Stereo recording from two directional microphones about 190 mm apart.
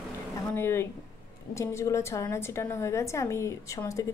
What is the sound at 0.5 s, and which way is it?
A woman's voice, 10° left (ahead or behind).